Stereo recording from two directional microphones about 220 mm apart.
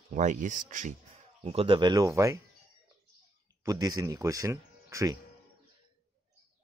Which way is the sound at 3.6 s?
15° right (ahead or behind).